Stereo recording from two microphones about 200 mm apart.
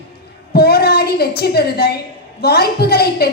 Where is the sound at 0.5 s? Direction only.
50° left (ahead or behind).